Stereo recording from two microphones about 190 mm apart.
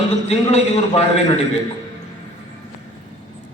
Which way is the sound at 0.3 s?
35° left (ahead or behind).